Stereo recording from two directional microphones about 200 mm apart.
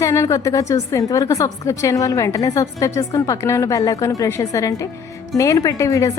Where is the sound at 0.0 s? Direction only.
15° left (ahead or behind).